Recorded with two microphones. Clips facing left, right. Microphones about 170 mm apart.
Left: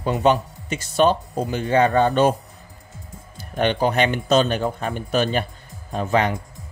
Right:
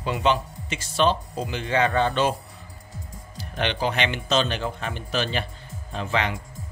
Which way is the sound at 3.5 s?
45° left (ahead or behind).